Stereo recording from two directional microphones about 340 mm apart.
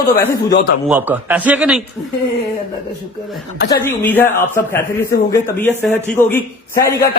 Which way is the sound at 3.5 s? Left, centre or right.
Left.